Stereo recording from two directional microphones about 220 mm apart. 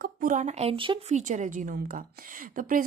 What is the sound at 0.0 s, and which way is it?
Speech, 40° right (ahead or behind).